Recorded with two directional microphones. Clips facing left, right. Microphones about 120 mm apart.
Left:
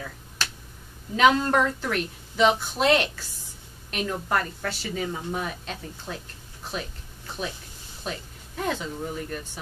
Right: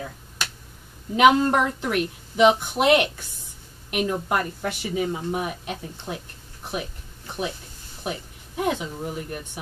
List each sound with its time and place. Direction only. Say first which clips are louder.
1.1 s a woman's voice: right 3 dB; 15° right (ahead or behind)